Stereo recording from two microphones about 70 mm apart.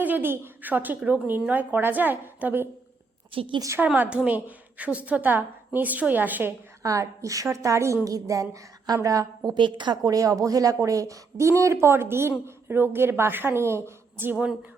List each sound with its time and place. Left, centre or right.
0.0 s a woman's voice: right
3.9 s a woman's voice: centre
6.8 s a woman's voice: right
9.7 s a woman's voice: right